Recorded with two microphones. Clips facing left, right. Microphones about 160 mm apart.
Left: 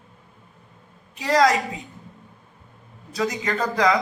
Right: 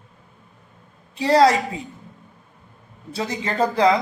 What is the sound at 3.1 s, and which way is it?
Speech, 30° right (ahead or behind).